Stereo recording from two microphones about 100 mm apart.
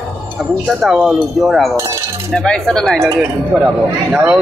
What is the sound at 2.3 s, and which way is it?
Speech, 10° left (ahead or behind).